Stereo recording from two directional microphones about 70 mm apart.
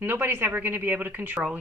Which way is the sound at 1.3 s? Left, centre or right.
Centre.